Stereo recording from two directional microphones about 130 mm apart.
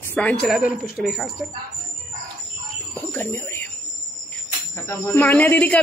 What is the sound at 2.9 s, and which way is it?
Bird, 15° left (ahead or behind).